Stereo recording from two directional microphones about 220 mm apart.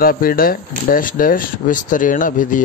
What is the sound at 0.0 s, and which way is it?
A man's voice, 40° left (ahead or behind).